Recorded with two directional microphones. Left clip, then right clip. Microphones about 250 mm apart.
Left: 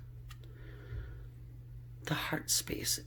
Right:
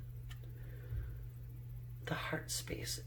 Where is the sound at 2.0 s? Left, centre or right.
Left.